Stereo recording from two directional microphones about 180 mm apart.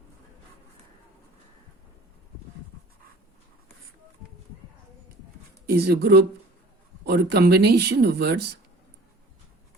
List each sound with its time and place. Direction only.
5.6 s speech: 60° right (ahead or behind)